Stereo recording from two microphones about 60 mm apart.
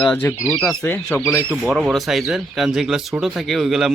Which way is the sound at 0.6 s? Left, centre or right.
Centre.